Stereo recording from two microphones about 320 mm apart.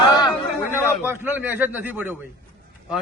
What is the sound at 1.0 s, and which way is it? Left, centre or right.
A man's voice, centre.